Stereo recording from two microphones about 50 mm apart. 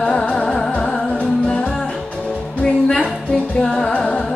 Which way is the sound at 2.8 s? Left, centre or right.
Centre.